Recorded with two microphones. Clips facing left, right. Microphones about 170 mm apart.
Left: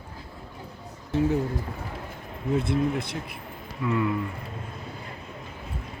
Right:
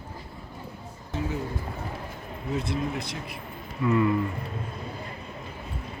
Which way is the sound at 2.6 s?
55° left (ahead or behind).